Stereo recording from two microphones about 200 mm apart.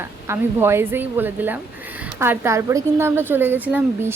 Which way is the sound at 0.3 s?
10° right (ahead or behind).